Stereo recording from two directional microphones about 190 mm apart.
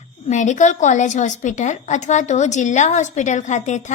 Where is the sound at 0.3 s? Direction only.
40° left (ahead or behind).